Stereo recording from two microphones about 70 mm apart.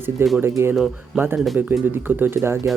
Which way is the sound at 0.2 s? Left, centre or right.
Right.